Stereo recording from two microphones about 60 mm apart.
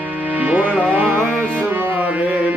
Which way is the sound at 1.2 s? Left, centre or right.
Centre.